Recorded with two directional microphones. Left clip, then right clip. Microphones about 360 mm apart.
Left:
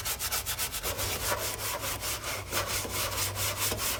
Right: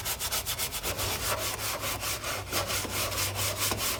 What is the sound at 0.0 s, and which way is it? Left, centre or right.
Rub, centre.